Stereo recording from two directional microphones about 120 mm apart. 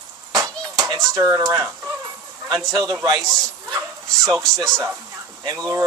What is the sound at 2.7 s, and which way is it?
Speech, 30° right (ahead or behind).